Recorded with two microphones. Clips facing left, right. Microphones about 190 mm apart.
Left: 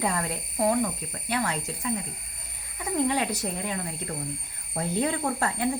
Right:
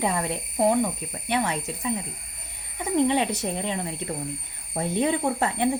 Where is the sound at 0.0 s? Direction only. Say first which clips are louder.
Right 2 dB; 20° right (ahead or behind).